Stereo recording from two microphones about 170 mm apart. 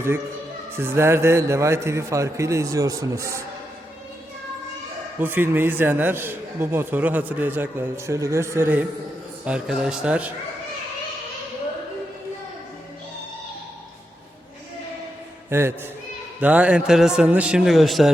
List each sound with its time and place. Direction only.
0.8 s a man's voice: 15° right (ahead or behind)
5.2 s a man's voice: 10° right (ahead or behind)
15.4 s a man's voice: 15° right (ahead or behind)